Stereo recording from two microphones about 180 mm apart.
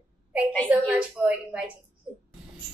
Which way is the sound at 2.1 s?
5° right (ahead or behind).